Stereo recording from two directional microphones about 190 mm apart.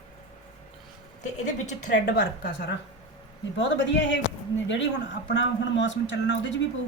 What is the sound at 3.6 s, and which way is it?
Speech, 70° left (ahead or behind).